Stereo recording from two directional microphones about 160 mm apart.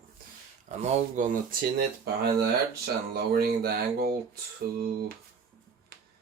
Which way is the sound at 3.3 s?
70° right (ahead or behind).